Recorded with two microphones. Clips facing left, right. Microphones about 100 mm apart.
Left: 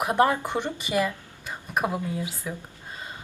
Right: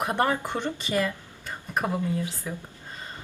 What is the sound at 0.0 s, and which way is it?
Speech, 15° left (ahead or behind).